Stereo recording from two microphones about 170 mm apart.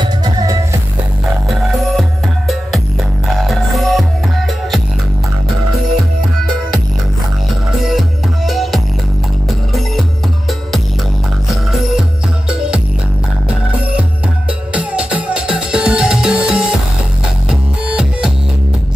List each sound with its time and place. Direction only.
0.0 s music: 25° right (ahead or behind)
1.5 s music: centre (ahead or behind)
8.5 s music: centre (ahead or behind)
12.4 s music: 5° right (ahead or behind)
14.7 s music: 5° right (ahead or behind)